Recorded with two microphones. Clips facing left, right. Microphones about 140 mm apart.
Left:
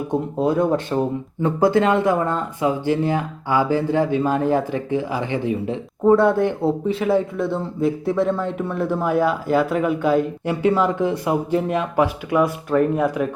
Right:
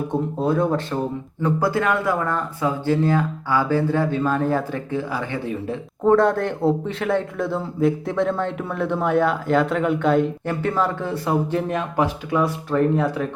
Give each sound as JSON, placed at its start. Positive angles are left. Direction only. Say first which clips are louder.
{"t": 0.1, "sound": "speech", "louder": "left 3 dB", "side_deg": 20}
{"t": 6.1, "sound": "speech", "louder": "left 2 dB", "side_deg": 5}